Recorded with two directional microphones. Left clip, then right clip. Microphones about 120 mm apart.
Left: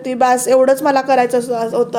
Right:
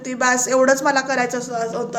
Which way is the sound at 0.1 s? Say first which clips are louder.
Left 6 dB; 50° left (ahead or behind).